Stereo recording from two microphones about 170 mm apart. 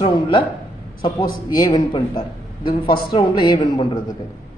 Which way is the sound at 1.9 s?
30° left (ahead or behind).